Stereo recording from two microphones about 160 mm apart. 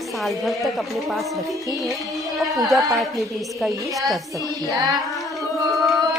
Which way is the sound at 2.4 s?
Centre (ahead or behind).